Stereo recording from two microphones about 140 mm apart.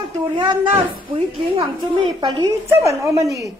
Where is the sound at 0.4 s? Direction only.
35° right (ahead or behind).